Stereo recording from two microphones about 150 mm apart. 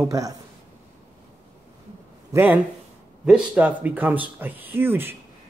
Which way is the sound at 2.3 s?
15° right (ahead or behind).